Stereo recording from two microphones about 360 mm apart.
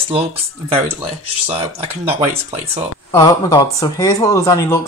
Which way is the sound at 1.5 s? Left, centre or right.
Centre.